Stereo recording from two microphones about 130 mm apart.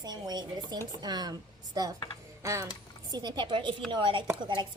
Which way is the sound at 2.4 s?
25° right (ahead or behind).